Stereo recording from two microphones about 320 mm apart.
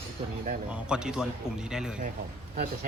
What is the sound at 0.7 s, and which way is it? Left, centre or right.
Speech, centre.